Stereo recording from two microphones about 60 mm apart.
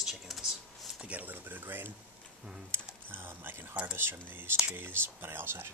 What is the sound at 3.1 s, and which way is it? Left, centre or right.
Speech, right.